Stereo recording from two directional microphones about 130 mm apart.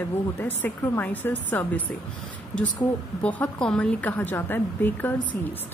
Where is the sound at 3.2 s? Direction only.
10° left (ahead or behind).